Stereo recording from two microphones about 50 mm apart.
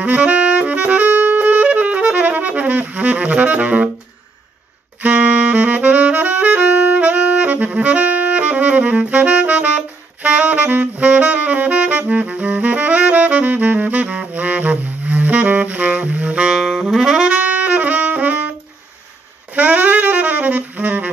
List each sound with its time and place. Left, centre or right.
0.0 s saxophone: right
5.0 s saxophone: right
16.5 s saxophone: centre; by 18.5 s right
19.5 s saxophone: right